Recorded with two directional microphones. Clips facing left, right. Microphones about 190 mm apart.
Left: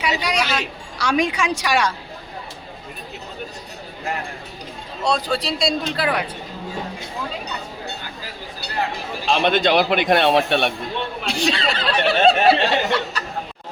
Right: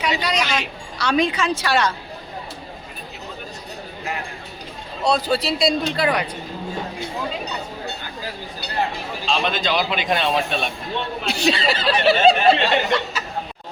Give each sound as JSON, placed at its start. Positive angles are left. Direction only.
{"t": 0.0, "sound": "a woman's voice", "side_deg": 10}
{"t": 5.0, "sound": "speech", "side_deg": -5}
{"t": 9.2, "sound": "a man's voice", "side_deg": 60}
{"t": 11.3, "sound": "speech", "side_deg": -5}